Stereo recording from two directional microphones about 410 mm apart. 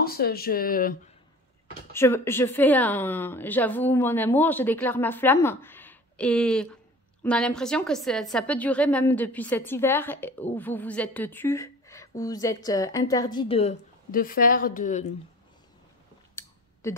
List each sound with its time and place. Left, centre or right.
0.0 s speech: left
2.0 s a woman's voice: centre
16.4 s a sound: centre
16.8 s a woman's voice: centre